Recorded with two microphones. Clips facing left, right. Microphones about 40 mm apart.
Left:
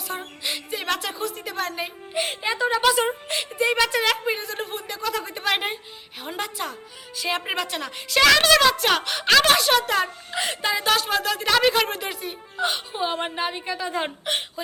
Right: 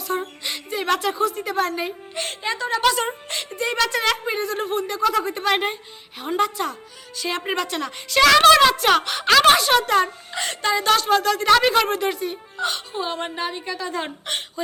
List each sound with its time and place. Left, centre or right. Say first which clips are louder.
0.1 s a woman's voice: right 4 dB; centre